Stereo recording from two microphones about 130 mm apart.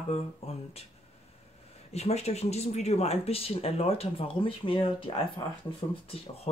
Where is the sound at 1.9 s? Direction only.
55° left (ahead or behind).